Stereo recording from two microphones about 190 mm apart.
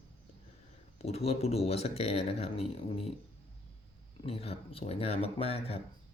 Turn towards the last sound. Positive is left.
turn(degrees=30)  # may be behind; listen again after turning